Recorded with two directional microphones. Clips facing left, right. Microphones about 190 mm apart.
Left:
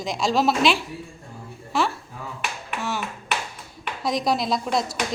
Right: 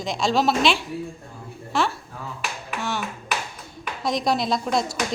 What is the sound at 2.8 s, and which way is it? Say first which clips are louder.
Clapping: even; 5° left (ahead or behind).